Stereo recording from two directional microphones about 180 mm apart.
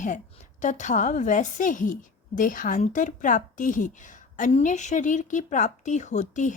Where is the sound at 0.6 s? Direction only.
45° left (ahead or behind).